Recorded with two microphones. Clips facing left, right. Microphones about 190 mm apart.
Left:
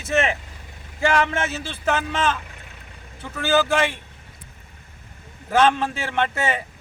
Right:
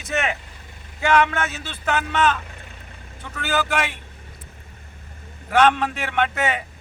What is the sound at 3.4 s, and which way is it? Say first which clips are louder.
Speech: left 4 dB; 30° left (ahead or behind).